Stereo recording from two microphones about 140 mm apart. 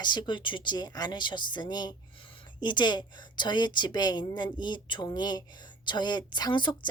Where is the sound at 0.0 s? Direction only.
30° left (ahead or behind).